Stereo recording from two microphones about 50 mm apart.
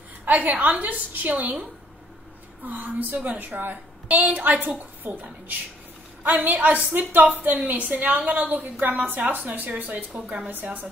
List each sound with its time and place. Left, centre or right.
0.2 s a woman's voice: right
10.2 s a woman's voice: right